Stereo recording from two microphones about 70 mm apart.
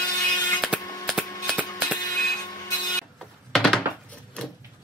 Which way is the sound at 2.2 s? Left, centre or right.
Left.